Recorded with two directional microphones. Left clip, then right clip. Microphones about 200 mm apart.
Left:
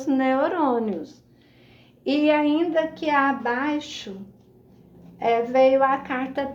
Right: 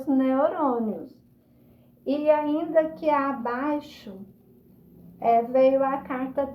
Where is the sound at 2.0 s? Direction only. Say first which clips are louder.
Left 2 dB; 35° left (ahead or behind).